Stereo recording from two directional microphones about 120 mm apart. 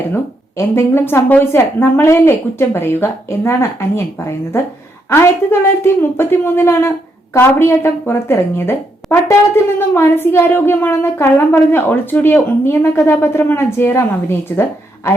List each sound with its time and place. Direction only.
0.1 s a woman's voice: 20° left (ahead or behind)